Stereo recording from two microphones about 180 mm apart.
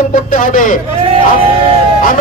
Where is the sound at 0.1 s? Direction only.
45° left (ahead or behind).